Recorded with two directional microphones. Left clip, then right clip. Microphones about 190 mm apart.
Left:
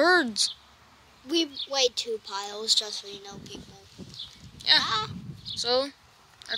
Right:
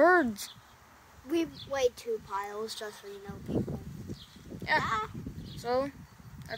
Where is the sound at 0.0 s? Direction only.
10° right (ahead or behind).